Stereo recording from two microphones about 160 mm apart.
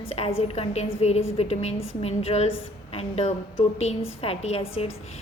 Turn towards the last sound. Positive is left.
turn(degrees=40)  # may be behind; listen again after turning